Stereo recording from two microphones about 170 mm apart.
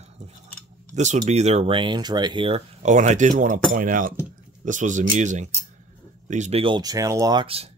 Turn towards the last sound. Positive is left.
turn(degrees=-35)  # may be behind; listen again after turning